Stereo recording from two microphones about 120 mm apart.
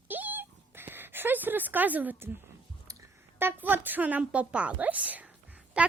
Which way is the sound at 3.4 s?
15° right (ahead or behind).